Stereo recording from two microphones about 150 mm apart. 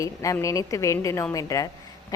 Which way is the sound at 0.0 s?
20° left (ahead or behind).